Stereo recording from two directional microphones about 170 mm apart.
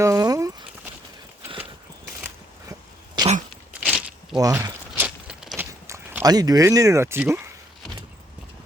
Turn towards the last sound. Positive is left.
turn(degrees=-15)  # may be behind; listen again after turning